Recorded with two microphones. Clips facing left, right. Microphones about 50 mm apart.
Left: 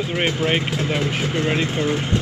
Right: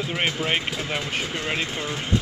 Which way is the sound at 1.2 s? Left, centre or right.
Left.